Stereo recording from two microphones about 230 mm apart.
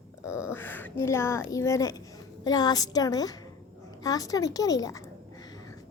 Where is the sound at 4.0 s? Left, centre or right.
Centre.